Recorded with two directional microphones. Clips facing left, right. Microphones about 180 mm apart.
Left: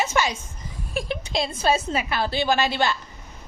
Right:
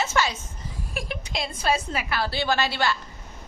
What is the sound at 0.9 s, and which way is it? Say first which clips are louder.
A woman's voice: left 6 dB; 25° left (ahead or behind).